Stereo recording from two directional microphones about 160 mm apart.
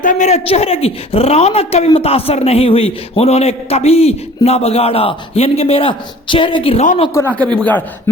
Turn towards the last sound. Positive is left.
turn(degrees=10)  # may be behind; listen again after turning